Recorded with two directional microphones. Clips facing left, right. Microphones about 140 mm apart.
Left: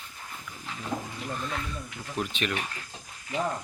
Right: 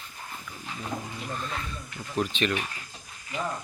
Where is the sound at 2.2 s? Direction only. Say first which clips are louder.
Right 4 dB; 10° left (ahead or behind).